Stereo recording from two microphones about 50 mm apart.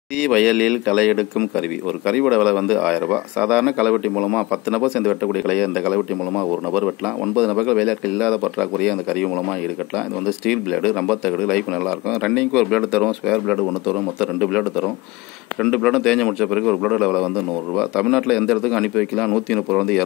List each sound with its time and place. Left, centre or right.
0.2 s speech: centre
4.0 s speech: centre
4.7 s speech: centre
8.7 s speech: centre